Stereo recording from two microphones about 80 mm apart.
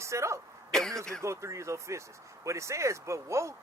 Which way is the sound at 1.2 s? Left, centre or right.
Right.